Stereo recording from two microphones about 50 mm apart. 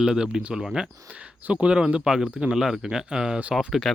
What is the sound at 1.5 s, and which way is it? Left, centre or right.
Speech, right.